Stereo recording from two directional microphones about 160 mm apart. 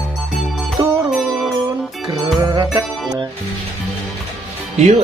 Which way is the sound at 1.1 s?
Centre (ahead or behind).